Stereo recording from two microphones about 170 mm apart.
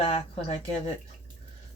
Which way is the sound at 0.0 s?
35° left (ahead or behind).